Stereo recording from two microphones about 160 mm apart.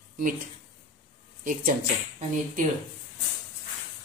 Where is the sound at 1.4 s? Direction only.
55° right (ahead or behind).